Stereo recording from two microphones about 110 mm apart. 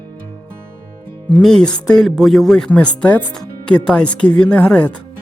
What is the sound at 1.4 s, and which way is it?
Speech, 5° left (ahead or behind).